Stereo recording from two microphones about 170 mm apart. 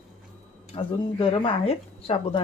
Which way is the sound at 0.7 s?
30° left (ahead or behind).